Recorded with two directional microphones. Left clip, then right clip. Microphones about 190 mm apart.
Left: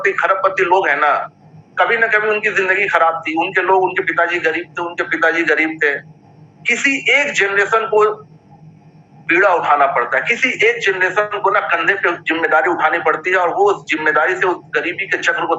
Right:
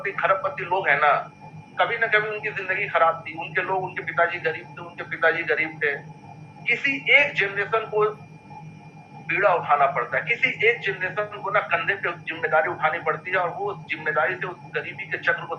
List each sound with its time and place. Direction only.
0.0 s a man's voice: 40° left (ahead or behind)
9.2 s a man's voice: 45° left (ahead or behind)